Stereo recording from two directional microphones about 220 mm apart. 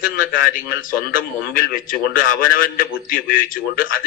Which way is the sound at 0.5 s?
40° left (ahead or behind).